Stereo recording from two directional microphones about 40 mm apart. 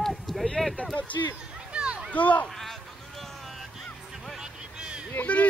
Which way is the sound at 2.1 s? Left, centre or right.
Left.